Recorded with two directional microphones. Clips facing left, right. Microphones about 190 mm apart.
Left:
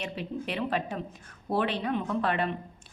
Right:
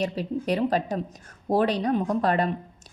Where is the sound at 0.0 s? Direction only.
40° right (ahead or behind).